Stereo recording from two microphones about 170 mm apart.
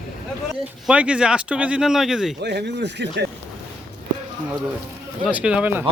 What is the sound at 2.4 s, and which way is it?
Speech, 80° right.